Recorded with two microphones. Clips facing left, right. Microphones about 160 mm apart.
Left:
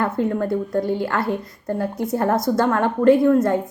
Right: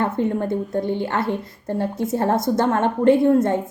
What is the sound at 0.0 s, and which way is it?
A woman's voice, 25° right (ahead or behind).